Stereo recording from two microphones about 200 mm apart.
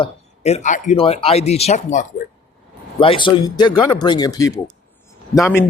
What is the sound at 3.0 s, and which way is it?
Speech, 25° left (ahead or behind).